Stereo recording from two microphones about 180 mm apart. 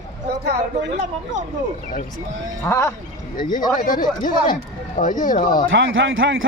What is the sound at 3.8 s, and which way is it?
Speech, 50° left (ahead or behind).